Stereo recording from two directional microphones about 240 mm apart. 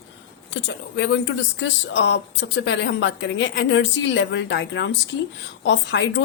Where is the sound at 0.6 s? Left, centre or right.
Left.